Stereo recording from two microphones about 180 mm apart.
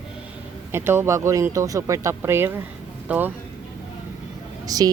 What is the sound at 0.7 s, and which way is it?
Speech, 15° right (ahead or behind).